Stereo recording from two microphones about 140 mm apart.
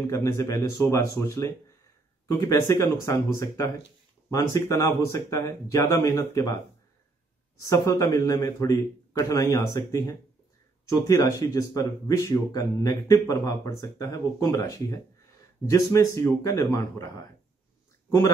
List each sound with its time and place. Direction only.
0.0 s speech: 20° left (ahead or behind)
7.6 s speech: 25° left (ahead or behind)